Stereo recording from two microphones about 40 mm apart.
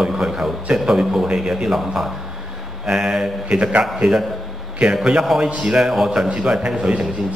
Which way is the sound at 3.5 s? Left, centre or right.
Right.